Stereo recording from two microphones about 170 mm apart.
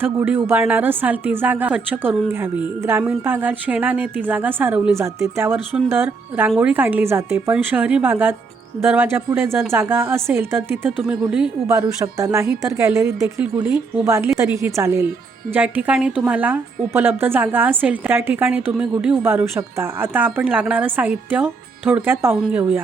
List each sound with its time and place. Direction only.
0.0 s a woman's voice: 15° right (ahead or behind)
11.7 s a woman's voice: 20° right (ahead or behind)